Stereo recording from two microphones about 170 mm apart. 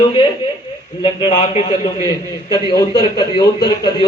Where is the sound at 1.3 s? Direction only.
40° left (ahead or behind).